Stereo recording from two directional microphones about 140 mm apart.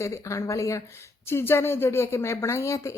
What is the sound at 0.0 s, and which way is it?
A woman's voice, 20° left (ahead or behind).